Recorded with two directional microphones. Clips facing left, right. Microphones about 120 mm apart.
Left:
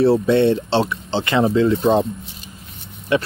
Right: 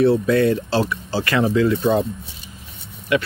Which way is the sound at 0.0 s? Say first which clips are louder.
Left 1 dB; 30° left (ahead or behind).